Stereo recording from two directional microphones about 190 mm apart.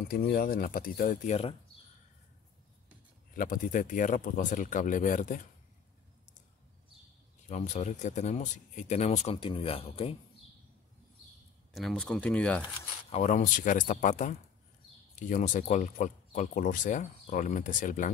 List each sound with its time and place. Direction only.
0.1 s speech: 55° left (ahead or behind); by 1.5 s 35° left (ahead or behind)
3.3 s speech: 45° left (ahead or behind)
7.4 s speech: 40° left (ahead or behind)
11.7 s speech: centre (ahead or behind)
13.1 s speech: 40° left (ahead or behind)